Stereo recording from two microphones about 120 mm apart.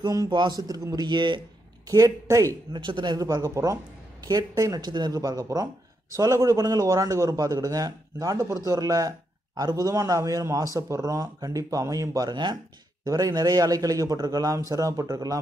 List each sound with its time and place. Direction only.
0.0 s a man's voice: 35° right (ahead or behind)
2.7 s a man's voice: 40° right (ahead or behind)